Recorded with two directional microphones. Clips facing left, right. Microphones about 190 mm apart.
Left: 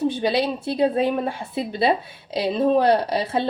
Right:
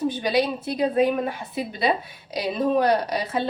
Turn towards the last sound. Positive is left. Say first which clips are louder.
# left 3 dB
turn(degrees=30)  # may be behind; listen again after turning